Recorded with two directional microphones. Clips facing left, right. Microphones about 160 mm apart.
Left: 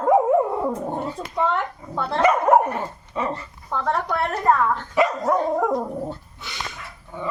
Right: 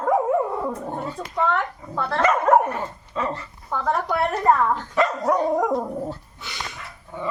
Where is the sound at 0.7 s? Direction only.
20° left (ahead or behind).